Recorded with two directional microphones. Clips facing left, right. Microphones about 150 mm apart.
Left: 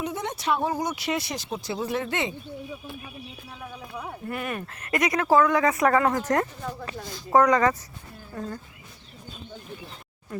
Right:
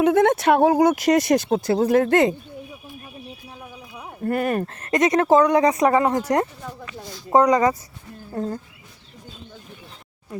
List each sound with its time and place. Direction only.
0.0 s speech: 60° right (ahead or behind)
0.9 s speech: 45° right (ahead or behind)
1.5 s speech: 55° right (ahead or behind)
4.2 s speech: 45° right (ahead or behind)
4.9 s speech: 25° right (ahead or behind)
8.4 s speech: 30° right (ahead or behind)